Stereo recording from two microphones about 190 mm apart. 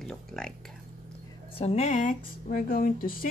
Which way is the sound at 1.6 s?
35° left (ahead or behind).